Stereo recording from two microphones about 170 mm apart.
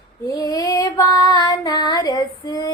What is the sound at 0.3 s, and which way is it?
Female singing, 20° left (ahead or behind).